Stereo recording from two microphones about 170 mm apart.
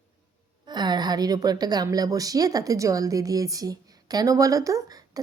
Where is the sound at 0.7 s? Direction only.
25° right (ahead or behind).